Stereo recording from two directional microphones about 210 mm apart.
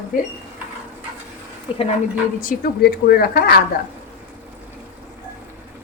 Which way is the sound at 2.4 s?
45° left (ahead or behind).